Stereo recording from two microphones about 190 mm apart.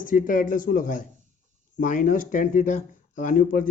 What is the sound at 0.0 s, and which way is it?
Speech, 45° left (ahead or behind).